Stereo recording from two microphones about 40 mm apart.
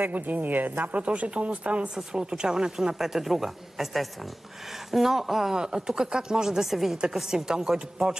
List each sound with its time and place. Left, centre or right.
0.0 s speech: right
2.1 s a woman's voice: centre
5.6 s a woman's voice: centre